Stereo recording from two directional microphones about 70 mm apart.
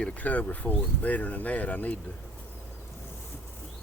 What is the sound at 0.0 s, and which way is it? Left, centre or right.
Speech, centre.